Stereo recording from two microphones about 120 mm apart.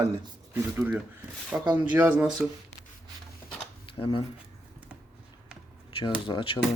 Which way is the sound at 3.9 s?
45° left (ahead or behind).